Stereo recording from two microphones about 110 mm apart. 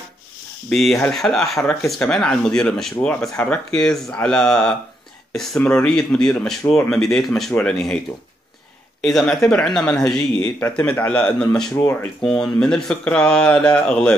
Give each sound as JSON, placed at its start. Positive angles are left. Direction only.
{"t": 0.7, "sound": "speech", "side_deg": 5}
{"t": 9.0, "sound": "speech", "side_deg": 5}
{"t": 12.2, "sound": "speech", "side_deg": 5}